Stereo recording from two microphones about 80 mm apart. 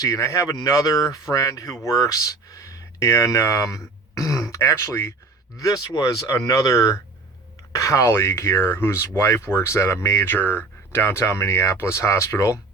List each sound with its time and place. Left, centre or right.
0.0 s speech: left
5.5 s speech: left